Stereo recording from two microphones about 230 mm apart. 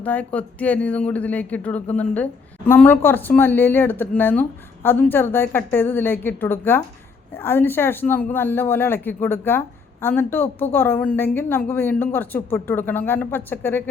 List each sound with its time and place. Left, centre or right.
0.0 s speech: centre